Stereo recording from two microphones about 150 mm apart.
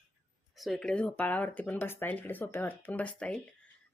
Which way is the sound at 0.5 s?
Centre (ahead or behind).